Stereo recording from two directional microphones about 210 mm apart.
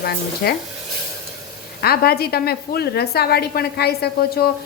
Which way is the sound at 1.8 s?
45° left (ahead or behind).